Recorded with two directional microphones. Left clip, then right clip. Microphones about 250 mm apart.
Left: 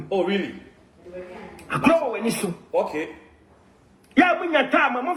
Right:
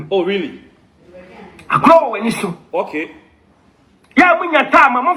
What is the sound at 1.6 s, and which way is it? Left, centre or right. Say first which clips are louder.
A man's voice: right 10 dB; centre.